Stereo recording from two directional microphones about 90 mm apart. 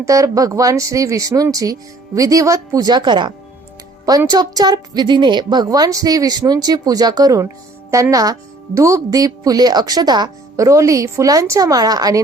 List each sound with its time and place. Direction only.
0.0 s speech: 40° right (ahead or behind); by 3.3 s 55° right (ahead or behind)
4.3 s a woman's voice: 45° right (ahead or behind)
10.6 s speech: 35° right (ahead or behind)